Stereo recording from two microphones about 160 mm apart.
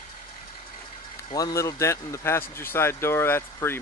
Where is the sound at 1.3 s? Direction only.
25° left (ahead or behind).